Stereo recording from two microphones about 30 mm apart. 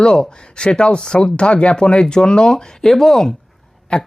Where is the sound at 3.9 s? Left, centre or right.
Left.